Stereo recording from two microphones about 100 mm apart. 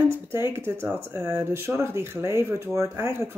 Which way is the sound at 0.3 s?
25° right (ahead or behind).